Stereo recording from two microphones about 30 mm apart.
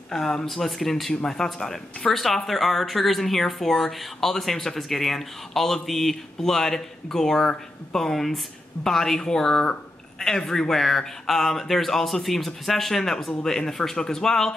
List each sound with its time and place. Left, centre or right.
0.1 s speech: centre
0.5 s speech: centre
1.2 s speech: centre
9.2 s speech: left